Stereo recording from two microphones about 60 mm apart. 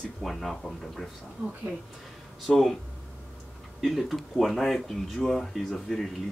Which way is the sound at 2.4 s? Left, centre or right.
Centre.